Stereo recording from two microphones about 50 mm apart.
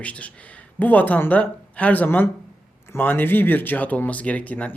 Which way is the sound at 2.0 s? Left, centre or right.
Left.